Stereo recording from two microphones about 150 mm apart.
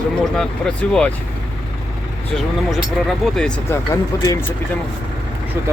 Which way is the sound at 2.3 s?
Centre (ahead or behind).